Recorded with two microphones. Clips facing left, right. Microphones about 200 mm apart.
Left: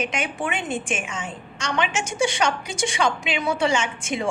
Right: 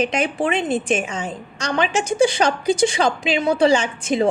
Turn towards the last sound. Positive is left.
turn(degrees=-35)  # may be behind; listen again after turning